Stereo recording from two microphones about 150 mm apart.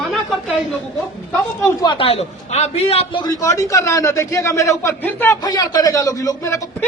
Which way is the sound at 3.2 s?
20° left (ahead or behind).